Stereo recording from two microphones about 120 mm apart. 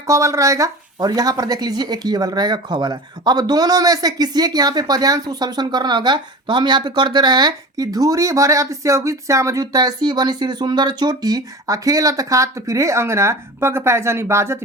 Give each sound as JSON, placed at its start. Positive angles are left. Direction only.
{"t": 0.1, "sound": "speech", "side_deg": -25}